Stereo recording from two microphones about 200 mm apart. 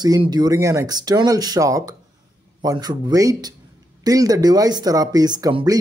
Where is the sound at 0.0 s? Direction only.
20° right (ahead or behind).